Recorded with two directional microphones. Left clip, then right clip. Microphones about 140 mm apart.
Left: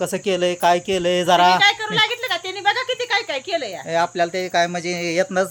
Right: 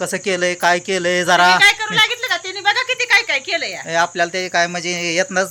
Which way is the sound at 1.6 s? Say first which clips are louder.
Right 4 dB; 25° left (ahead or behind).